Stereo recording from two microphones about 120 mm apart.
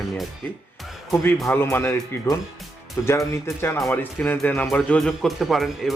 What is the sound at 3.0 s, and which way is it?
Speech, 20° left (ahead or behind).